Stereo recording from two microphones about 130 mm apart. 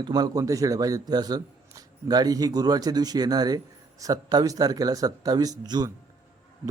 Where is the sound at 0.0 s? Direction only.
30° right (ahead or behind).